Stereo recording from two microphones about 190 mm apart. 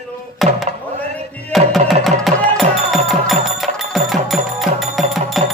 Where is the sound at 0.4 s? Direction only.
Centre (ahead or behind).